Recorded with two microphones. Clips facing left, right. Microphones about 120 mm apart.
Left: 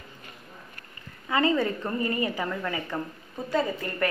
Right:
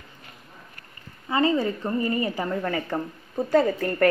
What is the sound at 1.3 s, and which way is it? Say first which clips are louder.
A woman's voice: right 2 dB; 30° right (ahead or behind).